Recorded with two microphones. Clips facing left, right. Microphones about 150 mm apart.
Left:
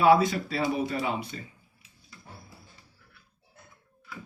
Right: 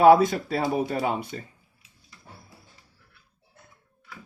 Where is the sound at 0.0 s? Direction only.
50° right (ahead or behind).